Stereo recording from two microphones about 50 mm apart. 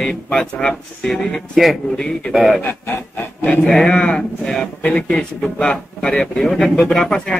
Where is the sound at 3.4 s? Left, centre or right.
Left.